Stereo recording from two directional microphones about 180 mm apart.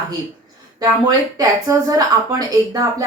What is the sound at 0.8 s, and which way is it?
Speech, 20° right (ahead or behind).